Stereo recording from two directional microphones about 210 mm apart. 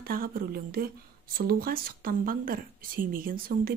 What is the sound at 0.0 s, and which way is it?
A woman's voice, 45° right (ahead or behind).